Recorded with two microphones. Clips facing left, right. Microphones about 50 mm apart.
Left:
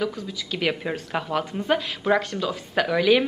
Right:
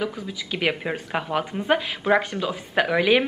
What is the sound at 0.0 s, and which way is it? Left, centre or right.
Speech, centre.